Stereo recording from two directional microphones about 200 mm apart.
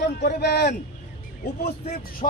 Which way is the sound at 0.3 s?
55° left (ahead or behind).